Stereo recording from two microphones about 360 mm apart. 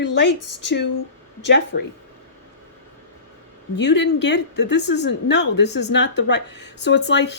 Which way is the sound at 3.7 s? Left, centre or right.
Left.